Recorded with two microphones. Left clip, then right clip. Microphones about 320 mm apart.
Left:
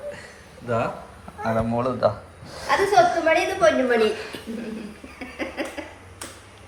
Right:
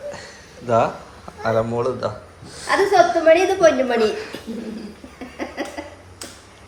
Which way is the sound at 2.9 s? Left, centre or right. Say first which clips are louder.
Right 5 dB; right.